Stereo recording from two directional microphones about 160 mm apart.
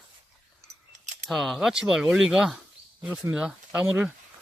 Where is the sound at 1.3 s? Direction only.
Centre (ahead or behind).